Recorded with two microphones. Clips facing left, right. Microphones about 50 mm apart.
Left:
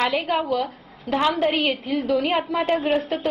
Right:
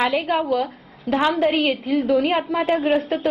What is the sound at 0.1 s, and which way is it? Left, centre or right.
A woman's voice, centre.